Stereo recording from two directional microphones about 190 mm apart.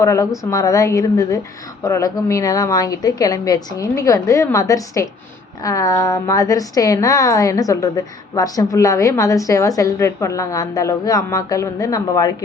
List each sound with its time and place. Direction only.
0.0 s a woman's voice: 15° left (ahead or behind)